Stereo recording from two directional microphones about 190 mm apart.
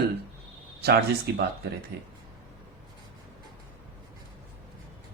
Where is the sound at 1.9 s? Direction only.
55° right (ahead or behind).